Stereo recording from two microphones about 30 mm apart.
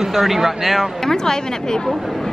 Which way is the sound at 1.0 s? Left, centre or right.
Left.